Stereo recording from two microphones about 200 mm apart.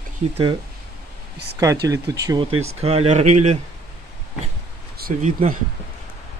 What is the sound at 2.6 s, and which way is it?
Speech, 30° right (ahead or behind).